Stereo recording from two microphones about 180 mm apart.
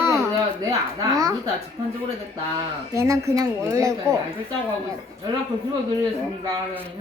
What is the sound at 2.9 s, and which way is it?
A woman's voice, 15° right (ahead or behind).